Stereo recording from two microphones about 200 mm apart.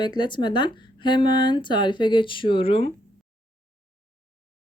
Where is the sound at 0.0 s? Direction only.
20° left (ahead or behind).